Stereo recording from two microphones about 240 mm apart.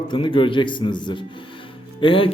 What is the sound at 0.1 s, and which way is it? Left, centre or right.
A man's voice, centre.